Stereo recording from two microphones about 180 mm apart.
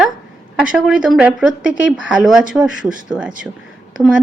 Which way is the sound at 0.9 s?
5° right (ahead or behind).